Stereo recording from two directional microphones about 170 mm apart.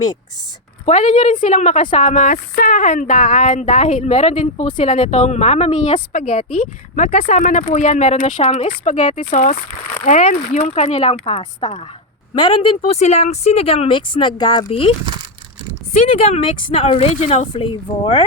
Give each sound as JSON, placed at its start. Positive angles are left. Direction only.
{"t": 0.9, "sound": "a woman's voice", "side_deg": 45}
{"t": 12.9, "sound": "speech", "side_deg": 40}
{"t": 17.5, "sound": "speech", "side_deg": 30}